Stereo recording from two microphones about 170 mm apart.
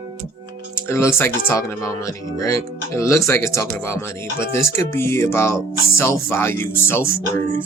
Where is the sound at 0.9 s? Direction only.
15° left (ahead or behind).